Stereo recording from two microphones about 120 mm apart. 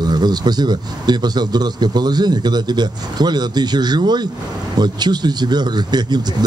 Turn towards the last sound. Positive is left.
turn(degrees=-35)  # may be behind; listen again after turning